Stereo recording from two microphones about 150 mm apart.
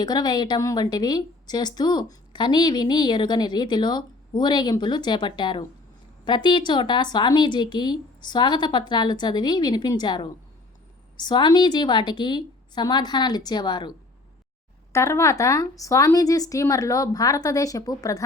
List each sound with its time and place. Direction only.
0.0 s a woman's voice: 30° left (ahead or behind)
14.9 s a woman's voice: 20° left (ahead or behind)